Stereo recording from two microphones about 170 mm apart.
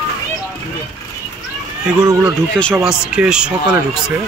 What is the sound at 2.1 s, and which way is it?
Speech, 20° right (ahead or behind).